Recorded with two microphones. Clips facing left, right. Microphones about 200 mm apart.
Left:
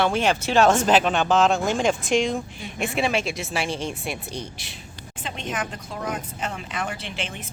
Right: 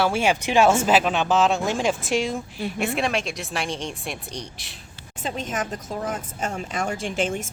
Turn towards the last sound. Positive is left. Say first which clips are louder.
# right 8 dB
turn(degrees=-45)  # may be behind; listen again after turning